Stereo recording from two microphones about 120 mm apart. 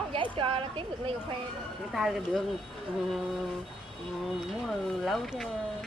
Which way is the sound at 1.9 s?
Centre (ahead or behind).